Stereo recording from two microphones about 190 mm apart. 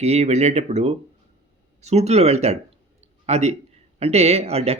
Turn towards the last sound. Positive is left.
turn(degrees=-35)  # may be behind; listen again after turning